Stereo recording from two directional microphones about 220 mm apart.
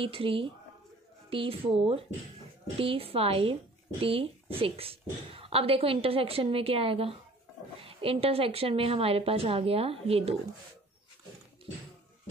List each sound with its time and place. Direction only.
0.0 s a woman's voice: 25° right (ahead or behind)